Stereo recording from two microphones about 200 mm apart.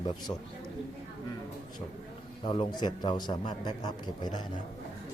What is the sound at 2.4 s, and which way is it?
A man's voice, 25° left (ahead or behind).